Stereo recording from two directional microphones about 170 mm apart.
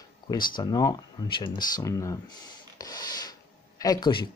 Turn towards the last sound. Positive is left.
turn(degrees=25)  # may be behind; listen again after turning